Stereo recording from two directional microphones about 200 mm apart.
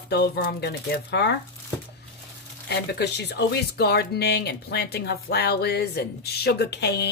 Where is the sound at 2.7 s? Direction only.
55° left (ahead or behind).